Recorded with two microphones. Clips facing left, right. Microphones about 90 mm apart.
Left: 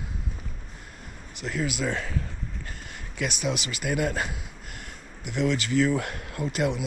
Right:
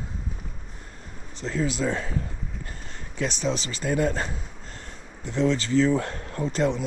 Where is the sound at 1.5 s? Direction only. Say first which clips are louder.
Right 3 dB; 25° right (ahead or behind).